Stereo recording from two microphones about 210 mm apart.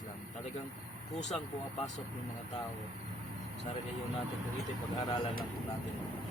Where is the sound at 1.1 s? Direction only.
35° left (ahead or behind).